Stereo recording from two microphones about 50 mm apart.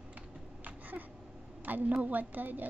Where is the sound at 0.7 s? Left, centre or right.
Right.